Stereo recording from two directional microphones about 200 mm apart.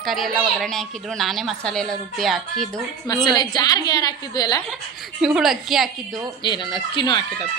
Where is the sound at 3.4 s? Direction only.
20° left (ahead or behind).